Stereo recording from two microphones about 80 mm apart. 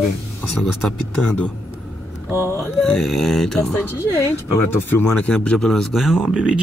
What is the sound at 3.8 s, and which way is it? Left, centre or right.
Speech, left.